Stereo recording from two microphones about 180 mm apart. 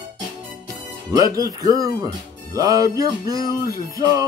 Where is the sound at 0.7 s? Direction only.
20° right (ahead or behind).